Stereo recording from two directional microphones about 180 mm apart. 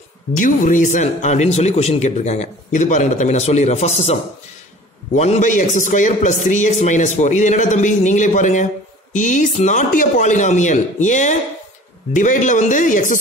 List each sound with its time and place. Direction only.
0.3 s a man's voice: 45° left (ahead or behind)